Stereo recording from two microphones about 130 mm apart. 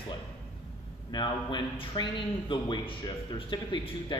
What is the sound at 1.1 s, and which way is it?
A man's voice, 35° left (ahead or behind).